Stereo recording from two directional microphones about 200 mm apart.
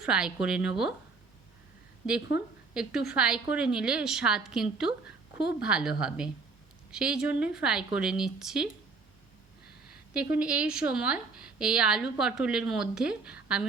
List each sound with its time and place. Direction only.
0.0 s a woman's voice: 5° right (ahead or behind)
2.3 s a woman's voice: 55° left (ahead or behind)
2.7 s a woman's voice: 5° right (ahead or behind)
10.3 s a woman's voice: 5° right (ahead or behind)